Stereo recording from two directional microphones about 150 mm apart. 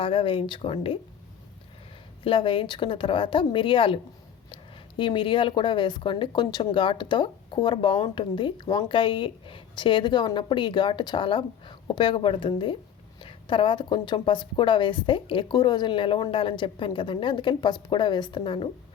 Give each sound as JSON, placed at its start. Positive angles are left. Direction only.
{"t": 0.0, "sound": "speech", "side_deg": 35}
{"t": 2.2, "sound": "speech", "side_deg": 35}